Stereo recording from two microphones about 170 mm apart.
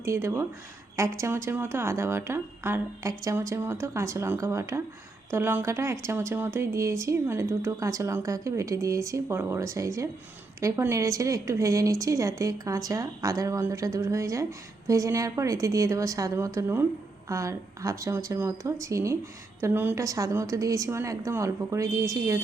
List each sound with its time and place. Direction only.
0.0 s a woman's voice: 15° right (ahead or behind)